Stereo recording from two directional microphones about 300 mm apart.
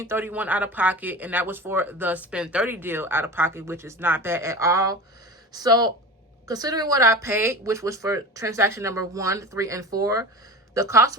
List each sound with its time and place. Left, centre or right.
0.0 s speech: centre